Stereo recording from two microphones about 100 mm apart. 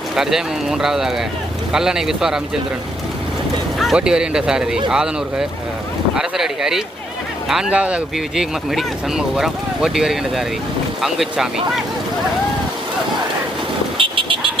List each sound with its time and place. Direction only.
0.2 s speech: 5° right (ahead or behind)
3.8 s speech: 5° right (ahead or behind)
14.0 s vehicle: 60° right (ahead or behind)